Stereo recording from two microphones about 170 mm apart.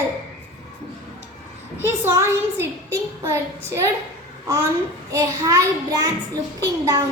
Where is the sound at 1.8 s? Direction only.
15° right (ahead or behind).